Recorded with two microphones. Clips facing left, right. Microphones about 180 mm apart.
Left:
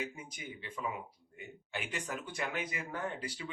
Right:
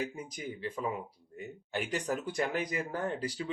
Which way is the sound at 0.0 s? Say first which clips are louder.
Right 5 dB; 35° right (ahead or behind).